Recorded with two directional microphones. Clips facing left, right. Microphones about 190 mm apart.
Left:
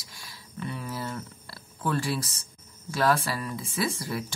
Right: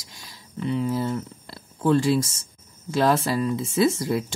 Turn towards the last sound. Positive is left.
turn(degrees=-25)  # may be behind; listen again after turning